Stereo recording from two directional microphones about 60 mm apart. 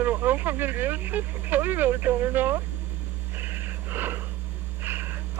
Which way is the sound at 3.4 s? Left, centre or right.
Right.